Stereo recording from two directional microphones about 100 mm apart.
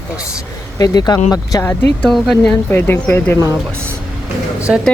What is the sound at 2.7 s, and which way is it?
Speech, 25° left (ahead or behind).